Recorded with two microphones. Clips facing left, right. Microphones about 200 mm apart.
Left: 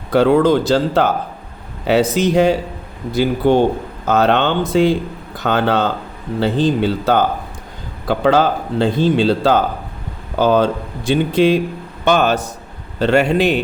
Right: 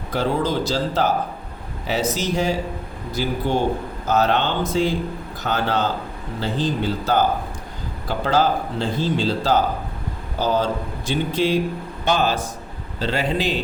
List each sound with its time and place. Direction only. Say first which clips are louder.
0.1 s speech: left 10 dB; 65° left (ahead or behind)